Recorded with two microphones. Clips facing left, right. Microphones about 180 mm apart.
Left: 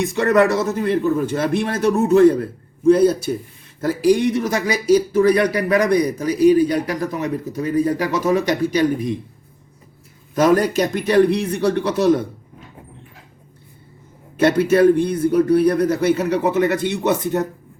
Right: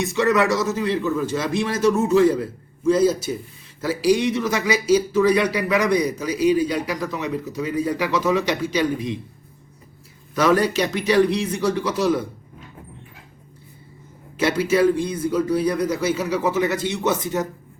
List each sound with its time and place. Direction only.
0.0 s a man's voice: 55° left (ahead or behind)
10.3 s speech: 45° left (ahead or behind); by 12.2 s 65° left (ahead or behind)
14.3 s a man's voice: 55° left (ahead or behind)